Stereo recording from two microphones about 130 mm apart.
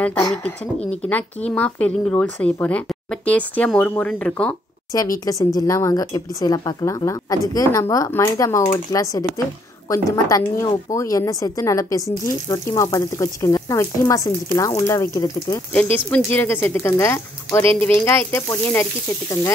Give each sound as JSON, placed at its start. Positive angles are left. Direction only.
{"t": 1.5, "sound": "a woman's voice", "side_deg": 10}
{"t": 4.9, "sound": "speech", "side_deg": 25}
{"t": 15.7, "sound": "a woman's voice", "side_deg": 10}